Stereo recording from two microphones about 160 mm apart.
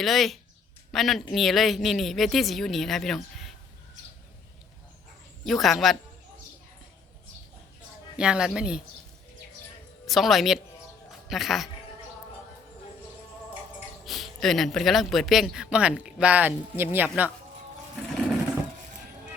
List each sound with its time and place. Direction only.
0.0 s speech: centre (ahead or behind)
5.5 s speech: centre (ahead or behind)
8.2 s speech: 5° right (ahead or behind)
10.1 s speech: centre (ahead or behind)
13.5 s speech: 5° right (ahead or behind)